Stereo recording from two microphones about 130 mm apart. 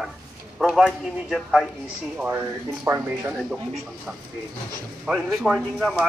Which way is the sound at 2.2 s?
15° right (ahead or behind).